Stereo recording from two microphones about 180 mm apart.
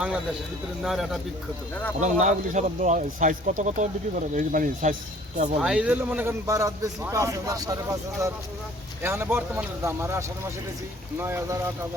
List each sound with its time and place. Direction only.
0.8 s speech: centre (ahead or behind)
2.0 s speech: 40° right (ahead or behind)
5.5 s speech: 5° right (ahead or behind)